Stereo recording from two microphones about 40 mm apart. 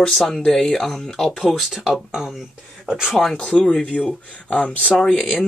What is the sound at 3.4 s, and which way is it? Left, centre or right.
Speech, left.